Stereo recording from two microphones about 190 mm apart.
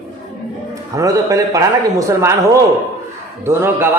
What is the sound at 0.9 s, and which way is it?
A man's voice, 15° right (ahead or behind).